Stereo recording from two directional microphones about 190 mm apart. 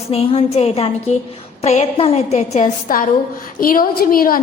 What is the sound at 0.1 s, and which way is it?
A woman's voice, 35° left (ahead or behind).